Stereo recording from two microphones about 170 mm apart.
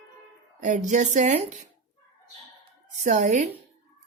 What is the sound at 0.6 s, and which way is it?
Speech, 45° right (ahead or behind).